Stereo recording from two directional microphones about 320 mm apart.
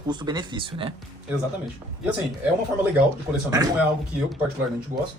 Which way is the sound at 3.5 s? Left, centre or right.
Centre.